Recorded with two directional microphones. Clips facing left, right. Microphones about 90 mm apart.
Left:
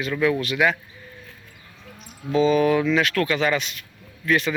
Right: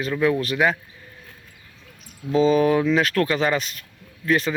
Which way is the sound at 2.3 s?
35° right (ahead or behind).